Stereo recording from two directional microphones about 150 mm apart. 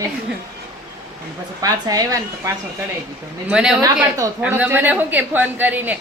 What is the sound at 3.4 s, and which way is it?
A woman's voice, 5° right (ahead or behind).